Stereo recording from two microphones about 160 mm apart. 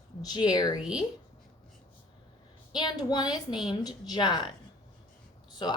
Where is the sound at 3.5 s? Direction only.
5° right (ahead or behind).